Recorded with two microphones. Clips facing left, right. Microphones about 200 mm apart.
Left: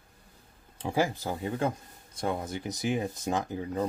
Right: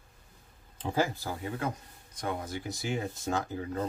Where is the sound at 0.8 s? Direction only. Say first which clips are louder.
Left 2 dB; 15° left (ahead or behind).